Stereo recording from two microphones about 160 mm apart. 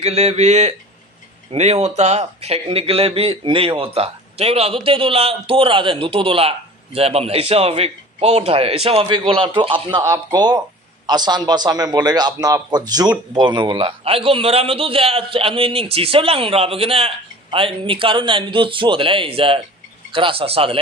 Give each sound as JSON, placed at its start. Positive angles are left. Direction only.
{"t": 0.0, "sound": "a man's voice", "side_deg": -40}